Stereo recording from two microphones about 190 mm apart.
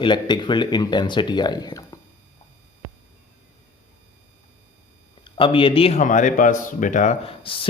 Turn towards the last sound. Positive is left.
turn(degrees=30)  # may be behind; listen again after turning